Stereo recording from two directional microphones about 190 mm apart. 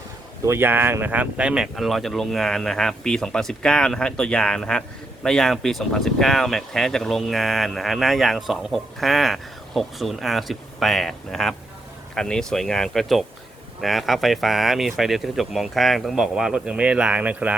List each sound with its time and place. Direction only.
0.4 s speech: 10° right (ahead or behind)